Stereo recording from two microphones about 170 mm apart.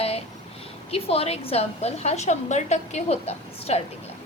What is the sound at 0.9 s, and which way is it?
A woman's voice, 35° left (ahead or behind).